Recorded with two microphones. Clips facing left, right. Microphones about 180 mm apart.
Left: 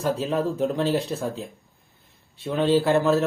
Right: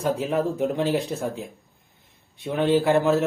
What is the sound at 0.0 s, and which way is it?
Speech, 15° right (ahead or behind).